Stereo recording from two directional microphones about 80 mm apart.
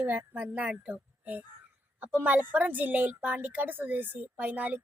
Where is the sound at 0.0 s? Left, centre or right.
Right.